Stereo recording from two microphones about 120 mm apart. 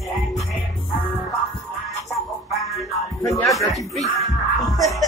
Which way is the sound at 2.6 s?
Centre (ahead or behind).